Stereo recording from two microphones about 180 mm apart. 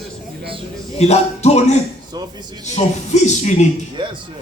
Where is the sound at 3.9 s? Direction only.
25° right (ahead or behind).